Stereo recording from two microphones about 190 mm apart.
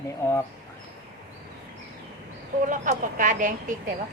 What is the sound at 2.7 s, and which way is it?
Speech, 45° right (ahead or behind).